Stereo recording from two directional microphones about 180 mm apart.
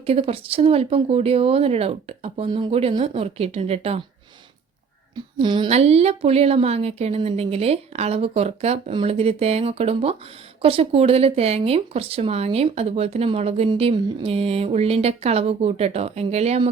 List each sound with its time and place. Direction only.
0.0 s speech: 35° right (ahead or behind)
5.1 s speech: 25° right (ahead or behind)